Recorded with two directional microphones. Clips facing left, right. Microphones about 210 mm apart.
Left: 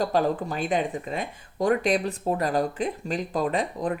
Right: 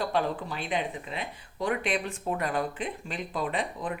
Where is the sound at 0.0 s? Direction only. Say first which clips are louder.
Left 5 dB; 40° left (ahead or behind).